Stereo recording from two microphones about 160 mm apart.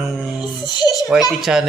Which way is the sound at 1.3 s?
Centre (ahead or behind).